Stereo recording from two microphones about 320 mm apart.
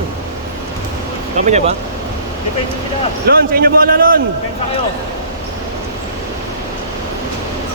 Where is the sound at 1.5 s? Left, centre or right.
Right.